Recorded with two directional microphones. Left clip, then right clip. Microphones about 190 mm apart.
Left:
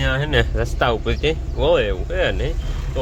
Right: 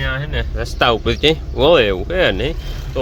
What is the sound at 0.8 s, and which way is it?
Speech, 15° right (ahead or behind).